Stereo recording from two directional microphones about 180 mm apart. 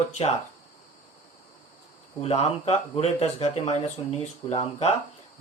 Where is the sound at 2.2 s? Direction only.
35° left (ahead or behind).